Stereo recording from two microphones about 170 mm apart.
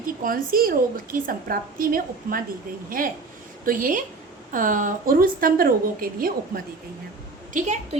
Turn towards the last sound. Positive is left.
turn(degrees=-45)  # may be behind; listen again after turning